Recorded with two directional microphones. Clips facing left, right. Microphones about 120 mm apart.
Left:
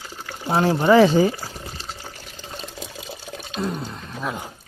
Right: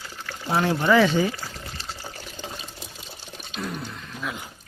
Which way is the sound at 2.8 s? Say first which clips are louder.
Left 7 dB; 90° left.